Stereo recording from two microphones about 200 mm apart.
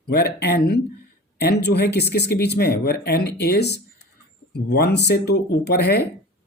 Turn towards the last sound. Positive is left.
turn(degrees=55)  # may be behind; listen again after turning